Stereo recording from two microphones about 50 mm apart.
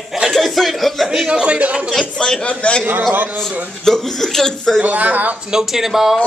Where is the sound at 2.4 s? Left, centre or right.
Left.